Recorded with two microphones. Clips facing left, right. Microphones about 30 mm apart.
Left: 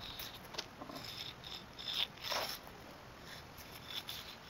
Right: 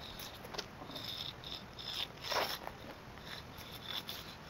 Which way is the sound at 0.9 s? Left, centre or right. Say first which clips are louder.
Right 3 dB; right.